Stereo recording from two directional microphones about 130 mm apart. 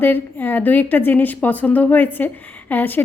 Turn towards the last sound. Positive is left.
turn(degrees=15)  # may be behind; listen again after turning